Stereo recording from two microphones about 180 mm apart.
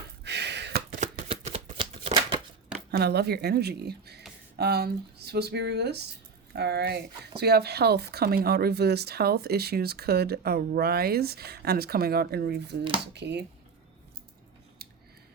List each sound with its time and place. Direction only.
0.3 s gasp: 70° right (ahead or behind)
1.1 s shuffling cards: 30° right (ahead or behind)
3.0 s speech: 65° right (ahead or behind)
14.8 s scissors: 60° right (ahead or behind)